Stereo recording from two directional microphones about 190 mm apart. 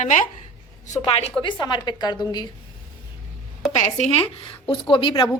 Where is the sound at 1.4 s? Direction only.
25° left (ahead or behind).